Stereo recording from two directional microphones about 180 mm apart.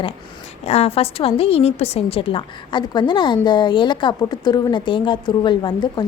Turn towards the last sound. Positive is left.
turn(degrees=25)  # may be behind; listen again after turning